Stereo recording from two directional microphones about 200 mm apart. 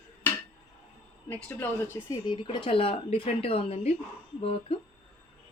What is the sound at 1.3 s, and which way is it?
Speech, 10° left (ahead or behind).